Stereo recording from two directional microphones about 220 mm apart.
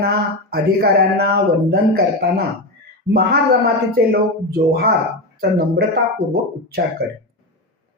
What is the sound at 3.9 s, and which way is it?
Speech, 45° right (ahead or behind).